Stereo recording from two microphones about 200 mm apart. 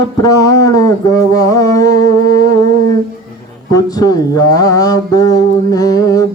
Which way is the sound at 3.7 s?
20° left (ahead or behind).